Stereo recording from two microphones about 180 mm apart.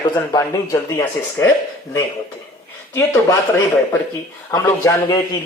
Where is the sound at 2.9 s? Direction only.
15° left (ahead or behind).